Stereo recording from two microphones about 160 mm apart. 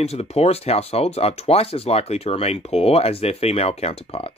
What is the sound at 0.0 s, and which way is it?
Speech, 40° left (ahead or behind).